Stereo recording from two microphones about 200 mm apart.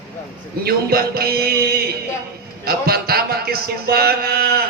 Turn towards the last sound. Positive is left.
turn(degrees=-50)  # may be behind; listen again after turning